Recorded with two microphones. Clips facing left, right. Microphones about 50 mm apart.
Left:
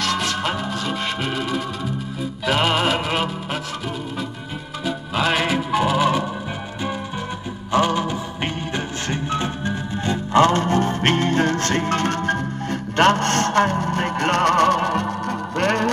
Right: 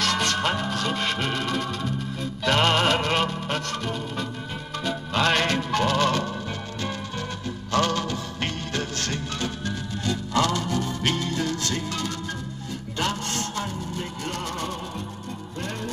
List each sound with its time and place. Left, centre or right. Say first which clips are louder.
0.0 s music: left 1 dB; centre
4.8 s music: left 2 dB; centre
7.7 s music: left 5 dB; centre; by 15.9 s left